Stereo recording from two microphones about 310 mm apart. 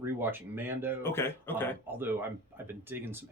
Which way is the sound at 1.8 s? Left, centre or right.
Centre.